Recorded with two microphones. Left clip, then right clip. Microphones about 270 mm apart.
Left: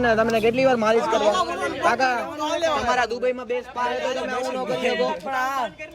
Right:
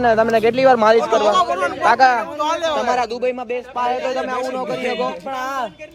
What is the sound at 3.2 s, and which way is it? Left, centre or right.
Speech, right.